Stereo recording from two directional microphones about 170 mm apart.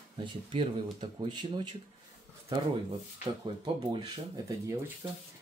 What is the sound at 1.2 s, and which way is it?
Speech, 25° right (ahead or behind).